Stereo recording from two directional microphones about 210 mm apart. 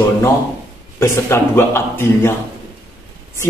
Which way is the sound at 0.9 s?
10° left (ahead or behind).